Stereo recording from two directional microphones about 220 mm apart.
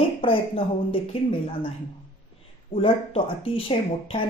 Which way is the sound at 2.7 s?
25° left (ahead or behind).